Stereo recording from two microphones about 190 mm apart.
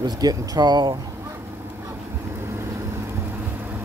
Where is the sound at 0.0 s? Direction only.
20° right (ahead or behind).